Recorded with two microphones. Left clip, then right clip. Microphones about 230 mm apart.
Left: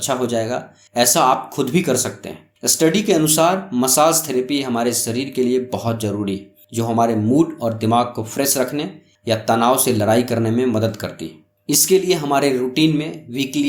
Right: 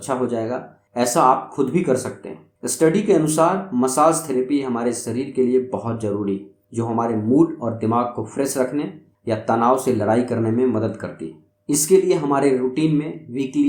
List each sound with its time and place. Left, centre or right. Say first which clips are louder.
0.0 s speech: left 3 dB; left